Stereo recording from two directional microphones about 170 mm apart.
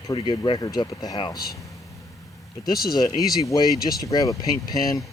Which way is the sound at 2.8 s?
25° left (ahead or behind).